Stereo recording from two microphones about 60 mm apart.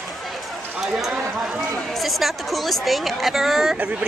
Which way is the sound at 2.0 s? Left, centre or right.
Centre.